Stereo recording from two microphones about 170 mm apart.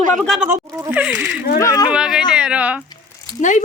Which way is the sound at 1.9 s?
5° right (ahead or behind).